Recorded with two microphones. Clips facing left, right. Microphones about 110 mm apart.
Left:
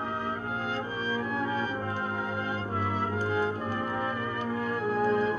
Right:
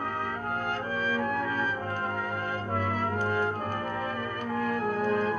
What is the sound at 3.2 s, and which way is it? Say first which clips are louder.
Music: even; 50° right (ahead or behind).